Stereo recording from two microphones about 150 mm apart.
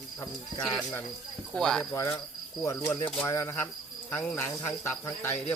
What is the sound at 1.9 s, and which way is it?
Speech, 20° left (ahead or behind).